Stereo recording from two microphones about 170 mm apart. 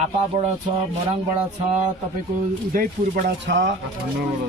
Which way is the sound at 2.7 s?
55° right (ahead or behind).